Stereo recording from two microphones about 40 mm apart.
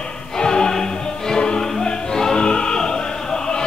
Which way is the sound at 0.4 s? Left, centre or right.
Centre.